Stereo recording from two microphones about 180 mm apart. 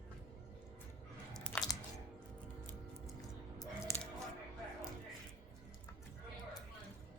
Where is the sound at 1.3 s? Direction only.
5° left (ahead or behind).